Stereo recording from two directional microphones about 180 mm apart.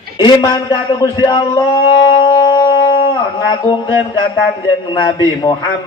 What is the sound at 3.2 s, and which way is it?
Speech, 20° left (ahead or behind).